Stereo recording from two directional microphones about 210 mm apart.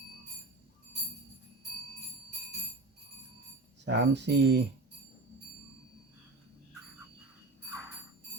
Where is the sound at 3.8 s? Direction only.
55° right (ahead or behind).